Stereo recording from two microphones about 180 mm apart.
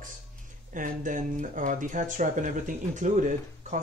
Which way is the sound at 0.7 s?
45° right (ahead or behind).